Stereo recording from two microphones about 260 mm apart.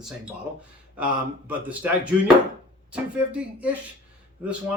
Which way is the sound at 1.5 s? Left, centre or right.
Centre.